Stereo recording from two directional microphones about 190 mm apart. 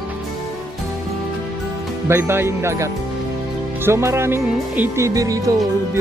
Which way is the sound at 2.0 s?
15° right (ahead or behind).